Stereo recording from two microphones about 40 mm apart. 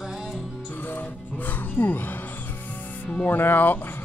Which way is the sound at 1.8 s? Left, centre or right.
Left.